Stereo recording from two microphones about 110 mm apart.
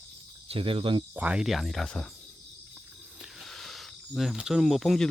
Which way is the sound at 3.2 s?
Centre (ahead or behind).